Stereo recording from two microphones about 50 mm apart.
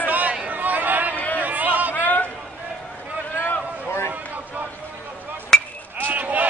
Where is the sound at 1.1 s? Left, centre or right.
Left.